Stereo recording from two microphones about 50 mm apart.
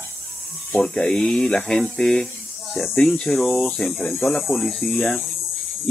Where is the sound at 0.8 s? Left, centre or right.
Centre.